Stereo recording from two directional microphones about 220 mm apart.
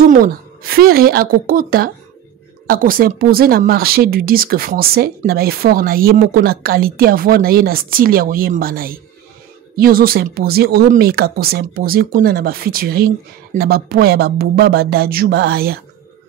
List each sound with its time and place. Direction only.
0.1 s speech: 40° right (ahead or behind)